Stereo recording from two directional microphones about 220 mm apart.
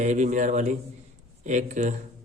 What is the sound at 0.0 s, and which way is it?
A man's voice, 35° right (ahead or behind).